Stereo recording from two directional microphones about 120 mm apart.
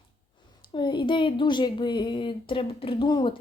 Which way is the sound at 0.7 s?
40° left (ahead or behind).